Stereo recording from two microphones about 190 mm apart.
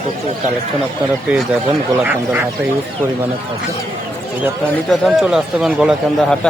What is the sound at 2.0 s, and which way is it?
Speech, 10° right (ahead or behind).